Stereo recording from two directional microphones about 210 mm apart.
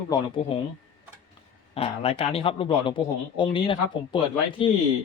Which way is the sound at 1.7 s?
25° left (ahead or behind).